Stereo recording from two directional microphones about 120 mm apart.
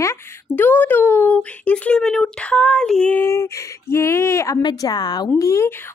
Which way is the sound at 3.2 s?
20° left (ahead or behind).